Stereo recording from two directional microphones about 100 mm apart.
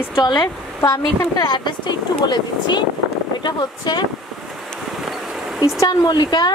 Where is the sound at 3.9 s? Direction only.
45° left (ahead or behind).